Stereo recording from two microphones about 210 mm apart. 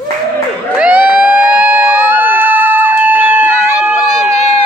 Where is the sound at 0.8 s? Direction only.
5° right (ahead or behind).